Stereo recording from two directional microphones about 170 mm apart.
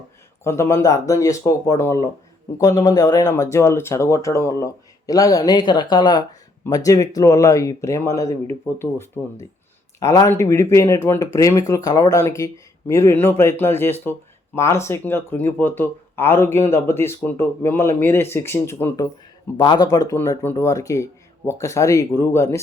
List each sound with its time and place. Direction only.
0.4 s speech: 15° left (ahead or behind)